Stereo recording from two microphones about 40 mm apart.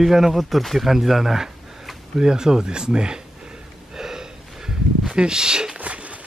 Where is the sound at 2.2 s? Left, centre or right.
Centre.